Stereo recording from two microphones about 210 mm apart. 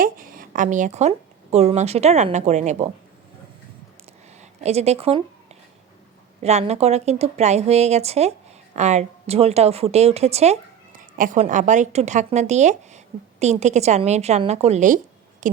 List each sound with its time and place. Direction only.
0.0 s a woman's voice: 40° right (ahead or behind)
4.4 s a woman's voice: 30° right (ahead or behind)
6.4 s a woman's voice: 30° right (ahead or behind)